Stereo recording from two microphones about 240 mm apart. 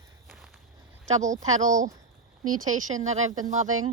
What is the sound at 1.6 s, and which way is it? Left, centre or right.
Speech, right.